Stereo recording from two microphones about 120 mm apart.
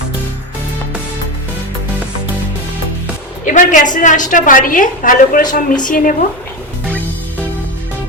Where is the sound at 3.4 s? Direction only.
90° left.